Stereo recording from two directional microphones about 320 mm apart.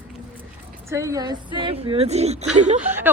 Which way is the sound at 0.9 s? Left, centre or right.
Centre.